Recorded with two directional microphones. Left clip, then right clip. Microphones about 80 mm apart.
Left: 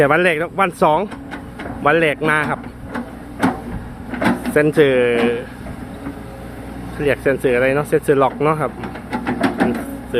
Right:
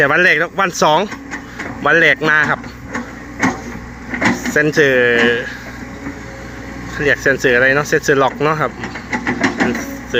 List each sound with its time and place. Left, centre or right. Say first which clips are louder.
0.0 s speech: right 3 dB; left
0.9 s speech: right 4 dB; centre
1.8 s speech: right 4 dB; centre
4.4 s drawer open or close: left 1 dB; centre
4.7 s speech: right 2 dB; left
5.2 s speech: right 5 dB; centre
6.9 s speech: right 3 dB; centre
9.6 s mechanisms: right 2 dB; centre